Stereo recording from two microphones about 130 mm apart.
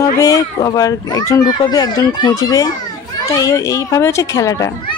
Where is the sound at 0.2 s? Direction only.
25° left (ahead or behind).